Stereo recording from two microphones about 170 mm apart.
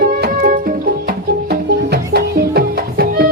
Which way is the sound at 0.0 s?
55° right (ahead or behind).